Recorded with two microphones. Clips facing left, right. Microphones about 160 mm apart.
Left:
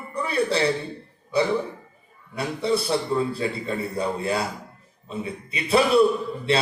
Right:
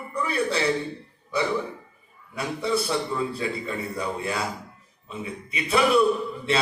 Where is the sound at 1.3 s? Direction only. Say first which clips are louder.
Left 3 dB; 30° left (ahead or behind).